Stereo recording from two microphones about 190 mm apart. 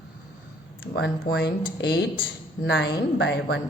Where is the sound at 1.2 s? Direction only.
60° left (ahead or behind).